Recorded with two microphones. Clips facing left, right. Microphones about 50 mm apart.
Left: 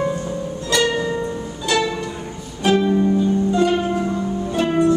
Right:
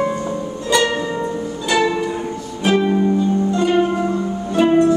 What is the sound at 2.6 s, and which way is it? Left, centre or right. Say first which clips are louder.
Music: right 1 dB; centre.